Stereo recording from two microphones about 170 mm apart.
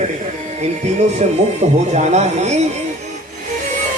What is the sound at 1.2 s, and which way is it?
A man's voice, 40° right (ahead or behind).